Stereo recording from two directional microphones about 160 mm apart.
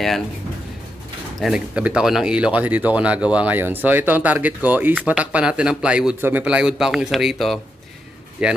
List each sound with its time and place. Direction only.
1.4 s speech: 5° right (ahead or behind)